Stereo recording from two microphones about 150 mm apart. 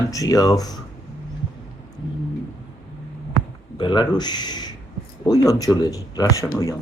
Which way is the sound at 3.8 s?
30° left (ahead or behind).